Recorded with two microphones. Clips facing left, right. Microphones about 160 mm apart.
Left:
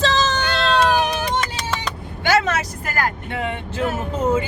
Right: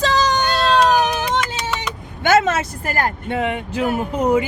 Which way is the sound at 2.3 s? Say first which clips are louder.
Right 3 dB; 25° right (ahead or behind).